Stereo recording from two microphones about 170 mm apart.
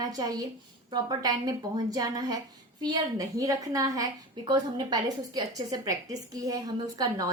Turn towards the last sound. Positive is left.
turn(degrees=-20)  # may be behind; listen again after turning